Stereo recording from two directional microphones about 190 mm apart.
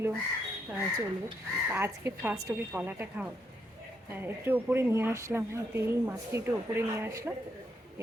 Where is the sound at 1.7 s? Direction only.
15° right (ahead or behind).